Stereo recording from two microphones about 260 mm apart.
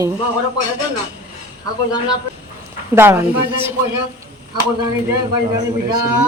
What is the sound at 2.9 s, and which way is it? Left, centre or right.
Speech, centre.